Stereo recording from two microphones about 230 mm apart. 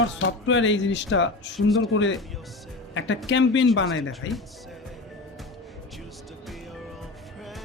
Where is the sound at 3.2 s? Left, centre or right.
Left.